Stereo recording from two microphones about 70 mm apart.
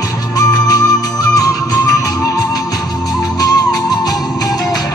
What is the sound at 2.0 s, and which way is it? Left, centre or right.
Music, left.